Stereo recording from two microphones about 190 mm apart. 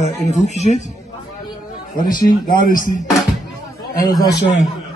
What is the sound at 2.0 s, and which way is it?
Speech, 45° left (ahead or behind).